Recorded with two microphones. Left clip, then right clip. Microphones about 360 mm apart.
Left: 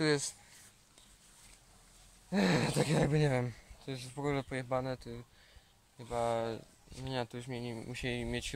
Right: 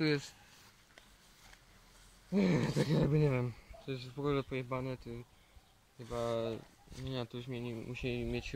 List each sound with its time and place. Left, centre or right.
2.3 s speech: left